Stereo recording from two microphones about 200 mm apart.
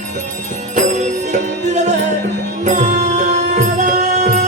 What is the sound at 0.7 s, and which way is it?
Music, 35° right (ahead or behind).